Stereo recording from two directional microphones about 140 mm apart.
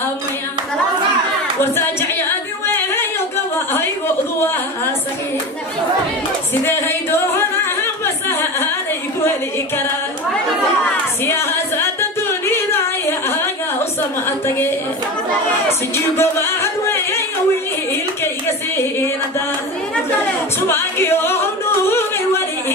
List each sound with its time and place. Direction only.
2.6 s singing: 15° left (ahead or behind)
6.5 s a sound: 15° left (ahead or behind)
11.2 s music: 15° left (ahead or behind)
13.2 s a sound: 15° left (ahead or behind)
14.3 s music: 15° left (ahead or behind)
16.1 s music: 15° left (ahead or behind)
18.8 s music: 15° left (ahead or behind)
20.7 s music: 15° left (ahead or behind)
21.8 s yodeling: 15° left (ahead or behind)